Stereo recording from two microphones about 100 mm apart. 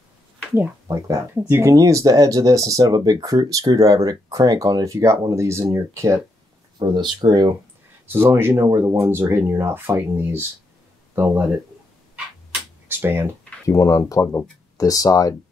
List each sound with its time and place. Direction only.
0.8 s speech: 35° right (ahead or behind)
6.8 s speech: 50° right (ahead or behind)
8.1 s speech: 25° right (ahead or behind)
12.8 s a sound: 25° right (ahead or behind)
13.7 s speech: 35° left (ahead or behind)